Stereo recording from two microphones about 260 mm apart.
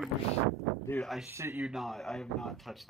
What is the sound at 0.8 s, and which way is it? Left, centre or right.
Speech, centre.